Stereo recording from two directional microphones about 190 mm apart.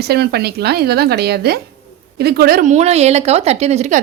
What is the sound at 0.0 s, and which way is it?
A woman's voice, 55° right (ahead or behind).